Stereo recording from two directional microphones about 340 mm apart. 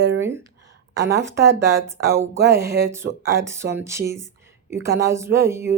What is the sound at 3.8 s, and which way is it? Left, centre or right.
Speech, centre.